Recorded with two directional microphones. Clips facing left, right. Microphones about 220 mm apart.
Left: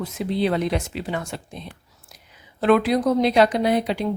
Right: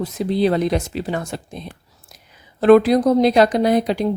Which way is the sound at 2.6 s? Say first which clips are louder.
Right 6 dB; 40° right (ahead or behind).